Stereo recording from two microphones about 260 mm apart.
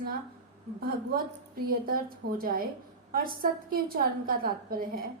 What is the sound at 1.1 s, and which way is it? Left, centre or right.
A woman's voice, right.